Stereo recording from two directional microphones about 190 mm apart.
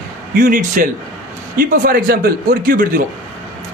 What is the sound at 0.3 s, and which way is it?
A woman's voice, 45° right (ahead or behind).